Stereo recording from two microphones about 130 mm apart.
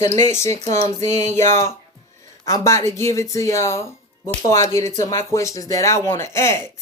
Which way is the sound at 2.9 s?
25° left (ahead or behind).